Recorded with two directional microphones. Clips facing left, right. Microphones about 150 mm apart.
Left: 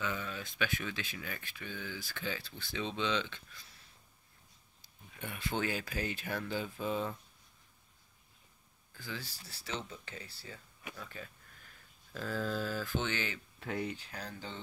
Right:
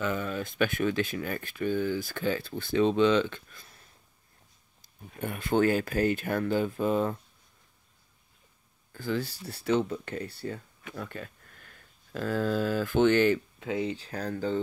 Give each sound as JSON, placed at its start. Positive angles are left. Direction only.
{"t": 0.0, "sound": "speech", "side_deg": -50}
{"t": 4.8, "sound": "speech", "side_deg": -50}
{"t": 8.9, "sound": "speech", "side_deg": -55}
{"t": 13.6, "sound": "speech", "side_deg": -20}
{"t": 13.9, "sound": "speech", "side_deg": -40}